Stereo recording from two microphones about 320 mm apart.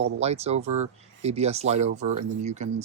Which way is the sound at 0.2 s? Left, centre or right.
Centre.